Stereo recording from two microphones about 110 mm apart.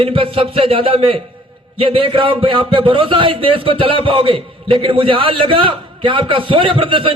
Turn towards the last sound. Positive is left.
turn(degrees=-55)  # may be behind; listen again after turning